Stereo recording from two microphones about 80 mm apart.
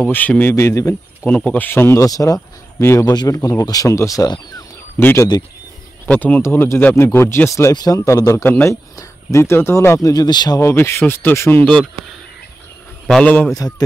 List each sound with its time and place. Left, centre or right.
0.0 s speech: left
1.2 s speech: centre
2.0 s speech: left
3.1 s speech: left
6.0 s speech: centre
6.4 s speech: left
7.7 s speech: left
10.0 s speech: left
10.6 s speech: left
13.2 s speech: left
13.6 s speech: left